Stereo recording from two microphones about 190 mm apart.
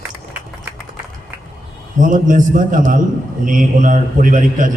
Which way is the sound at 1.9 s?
45° right (ahead or behind).